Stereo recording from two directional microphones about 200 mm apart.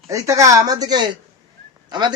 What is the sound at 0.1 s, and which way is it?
A woman's voice, 15° right (ahead or behind).